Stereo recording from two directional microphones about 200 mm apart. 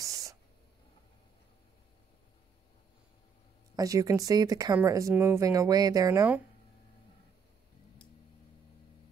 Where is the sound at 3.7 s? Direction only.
15° right (ahead or behind).